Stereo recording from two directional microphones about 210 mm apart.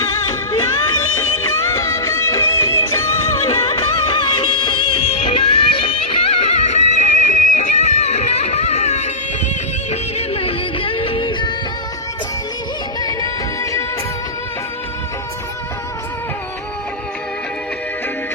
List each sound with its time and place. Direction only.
1.4 s music: 10° left (ahead or behind)
3.8 s music of bollywood: 25° left (ahead or behind)
9.9 s music: 30° left (ahead or behind)
13.0 s music: 20° left (ahead or behind)